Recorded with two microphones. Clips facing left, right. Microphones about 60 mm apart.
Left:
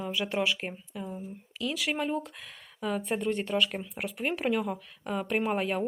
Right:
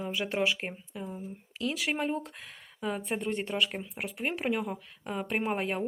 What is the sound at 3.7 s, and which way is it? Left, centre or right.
Speech, centre.